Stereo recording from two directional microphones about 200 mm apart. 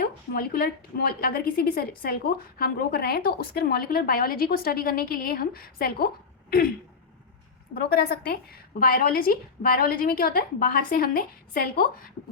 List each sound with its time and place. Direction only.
0.0 s a woman's voice: 50° left (ahead or behind)
7.7 s a woman's voice: 50° left (ahead or behind)